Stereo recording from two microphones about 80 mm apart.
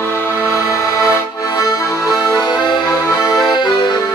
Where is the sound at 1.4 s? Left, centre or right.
Left.